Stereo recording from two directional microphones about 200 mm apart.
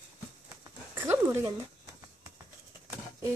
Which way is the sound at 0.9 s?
10° right (ahead or behind).